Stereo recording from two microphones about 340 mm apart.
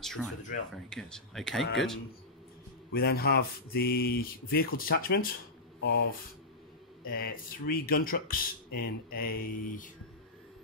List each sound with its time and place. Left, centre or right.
0.0 s speech: centre
2.9 s speech: left
7.1 s speech: left